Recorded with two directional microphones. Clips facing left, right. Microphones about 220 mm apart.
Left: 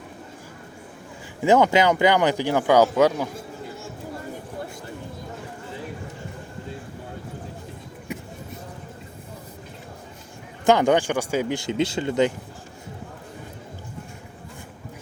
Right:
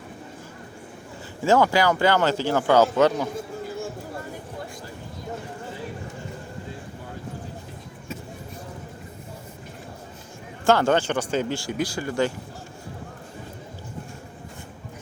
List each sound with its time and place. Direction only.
1.4 s speech: 20° left (ahead or behind)
10.7 s speech: 15° left (ahead or behind)